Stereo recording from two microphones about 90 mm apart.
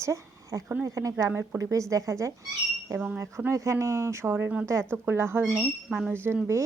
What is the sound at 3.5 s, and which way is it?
Speech, 35° right (ahead or behind).